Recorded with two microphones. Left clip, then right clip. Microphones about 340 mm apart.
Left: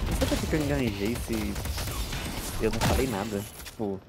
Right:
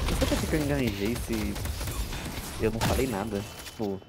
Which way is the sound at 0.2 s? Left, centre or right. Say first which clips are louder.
Left 1 dB; centre.